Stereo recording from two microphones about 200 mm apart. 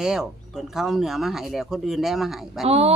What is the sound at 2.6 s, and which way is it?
Speech, 30° right (ahead or behind).